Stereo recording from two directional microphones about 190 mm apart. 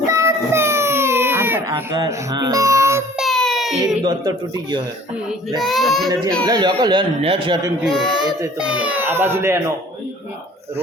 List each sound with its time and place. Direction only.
0.1 s baby cry: 15° right (ahead or behind)
3.2 s baby cry: centre (ahead or behind)
4.0 s speech: 20° right (ahead or behind)
5.5 s child singing: centre (ahead or behind)
6.4 s speech: 20° right (ahead or behind)
7.9 s child singing: centre (ahead or behind)
8.5 s speech: 5° right (ahead or behind)